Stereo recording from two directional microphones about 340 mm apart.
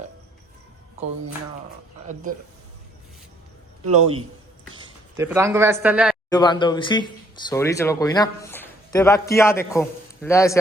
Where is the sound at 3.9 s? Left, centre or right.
Centre.